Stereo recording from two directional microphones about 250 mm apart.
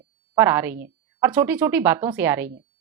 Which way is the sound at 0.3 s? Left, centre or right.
Centre.